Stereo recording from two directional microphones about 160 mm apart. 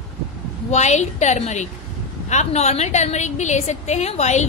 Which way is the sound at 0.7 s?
45° left (ahead or behind).